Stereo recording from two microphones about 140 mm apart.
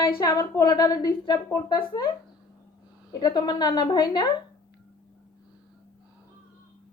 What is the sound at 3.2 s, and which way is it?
A woman's voice, 30° left (ahead or behind).